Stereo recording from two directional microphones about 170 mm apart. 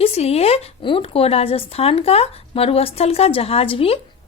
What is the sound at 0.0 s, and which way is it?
Speech, 35° left (ahead or behind).